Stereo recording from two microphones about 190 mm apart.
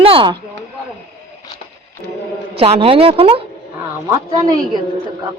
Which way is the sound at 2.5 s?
30° right (ahead or behind).